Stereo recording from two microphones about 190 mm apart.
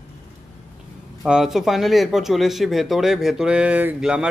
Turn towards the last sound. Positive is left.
turn(degrees=-5)  # may be behind; listen again after turning